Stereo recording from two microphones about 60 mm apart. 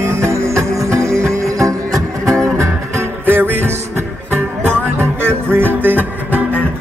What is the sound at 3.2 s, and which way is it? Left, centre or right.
Music, right.